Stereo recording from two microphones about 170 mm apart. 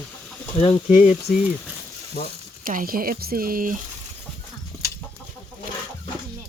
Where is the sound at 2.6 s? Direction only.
55° right (ahead or behind).